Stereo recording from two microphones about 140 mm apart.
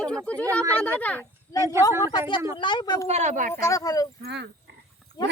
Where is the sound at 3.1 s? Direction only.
55° right (ahead or behind).